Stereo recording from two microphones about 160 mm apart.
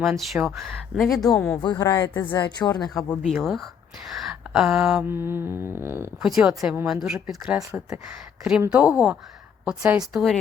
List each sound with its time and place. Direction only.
0.0 s speech: centre (ahead or behind)
1.6 s speech: 25° left (ahead or behind)
3.2 s speech: centre (ahead or behind)
5.0 s humming: 15° right (ahead or behind)
5.5 s speech: 20° left (ahead or behind)
5.8 s humming: 15° right (ahead or behind)
6.2 s speech: centre (ahead or behind)
8.7 s humming: 5° right (ahead or behind)
9.6 s speech: 5° right (ahead or behind)